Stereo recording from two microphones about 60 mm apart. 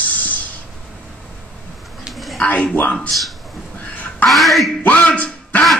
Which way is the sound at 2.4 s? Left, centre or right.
Left.